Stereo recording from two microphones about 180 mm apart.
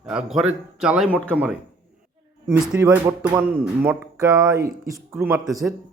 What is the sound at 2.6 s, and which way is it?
A man's voice, 5° right (ahead or behind).